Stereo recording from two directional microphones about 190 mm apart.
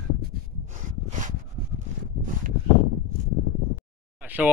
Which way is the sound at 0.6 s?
40° right (ahead or behind).